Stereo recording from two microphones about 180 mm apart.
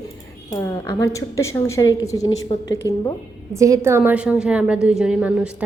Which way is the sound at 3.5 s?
15° right (ahead or behind).